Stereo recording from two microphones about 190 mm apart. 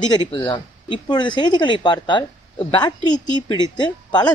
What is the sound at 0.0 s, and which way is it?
Speech, 25° left (ahead or behind).